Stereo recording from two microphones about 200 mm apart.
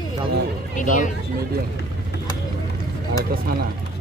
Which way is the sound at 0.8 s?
40° left (ahead or behind).